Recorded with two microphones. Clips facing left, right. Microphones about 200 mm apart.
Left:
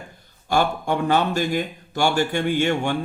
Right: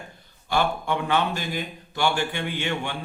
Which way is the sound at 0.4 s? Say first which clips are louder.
Left 3 dB; 45° left (ahead or behind).